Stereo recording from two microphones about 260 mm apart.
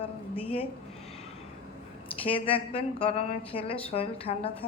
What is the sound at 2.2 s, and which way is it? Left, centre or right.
A woman's voice, left.